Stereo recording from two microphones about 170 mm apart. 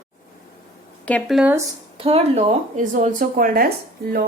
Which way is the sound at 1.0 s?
10° left (ahead or behind).